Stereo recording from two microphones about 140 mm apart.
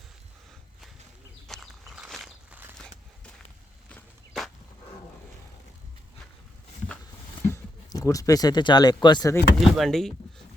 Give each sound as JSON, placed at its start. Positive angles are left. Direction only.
{"t": 1.5, "sound": "walk", "side_deg": 0}
{"t": 3.8, "sound": "a sound", "side_deg": 5}
{"t": 7.5, "sound": "speech", "side_deg": 25}
{"t": 9.6, "sound": "speech", "side_deg": 0}